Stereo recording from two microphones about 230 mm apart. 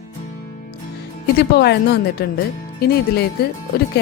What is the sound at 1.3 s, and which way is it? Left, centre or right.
Speech, left.